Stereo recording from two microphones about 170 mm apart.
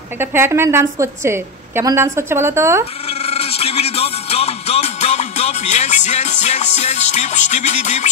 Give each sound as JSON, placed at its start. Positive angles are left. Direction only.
{"t": 0.2, "sound": "a woman's voice", "side_deg": -15}
{"t": 3.1, "sound": "music", "side_deg": 35}